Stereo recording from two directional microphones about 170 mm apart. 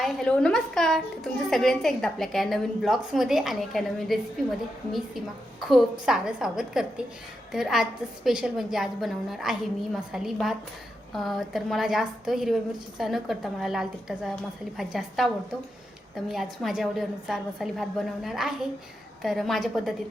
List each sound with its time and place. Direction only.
0.0 s a woman's voice: 5° left (ahead or behind)